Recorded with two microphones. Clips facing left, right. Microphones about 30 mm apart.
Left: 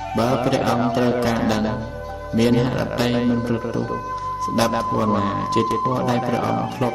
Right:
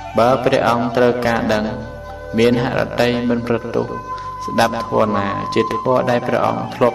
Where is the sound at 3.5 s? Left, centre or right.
Right.